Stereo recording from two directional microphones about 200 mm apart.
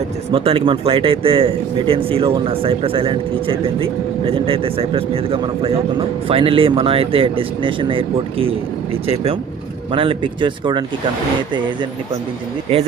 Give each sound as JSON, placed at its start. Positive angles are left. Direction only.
{"t": 0.3, "sound": "a man's voice", "side_deg": -30}